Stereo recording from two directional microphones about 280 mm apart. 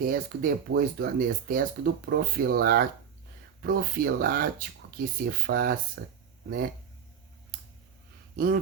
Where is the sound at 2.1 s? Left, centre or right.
Right.